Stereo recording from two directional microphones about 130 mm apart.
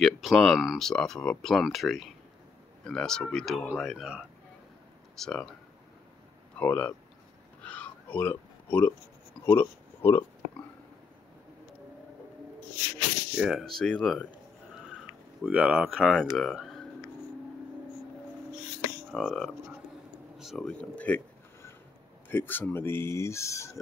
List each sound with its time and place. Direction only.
0.0 s speech: centre (ahead or behind)
6.6 s speech: 10° left (ahead or behind)
7.6 s a sound: 10° left (ahead or behind)
9.5 s speech: 15° left (ahead or behind)
13.3 s speech: 5° right (ahead or behind)
15.4 s speech: 10° right (ahead or behind)
19.1 s speech: centre (ahead or behind)
22.3 s speech: 15° left (ahead or behind)